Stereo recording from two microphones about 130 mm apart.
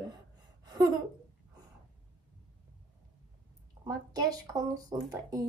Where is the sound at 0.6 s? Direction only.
30° right (ahead or behind).